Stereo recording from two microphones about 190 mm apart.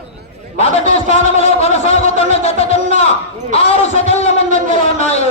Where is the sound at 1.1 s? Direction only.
35° left (ahead or behind).